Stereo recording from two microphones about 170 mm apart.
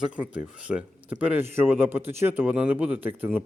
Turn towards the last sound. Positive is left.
turn(degrees=-10)  # may be behind; listen again after turning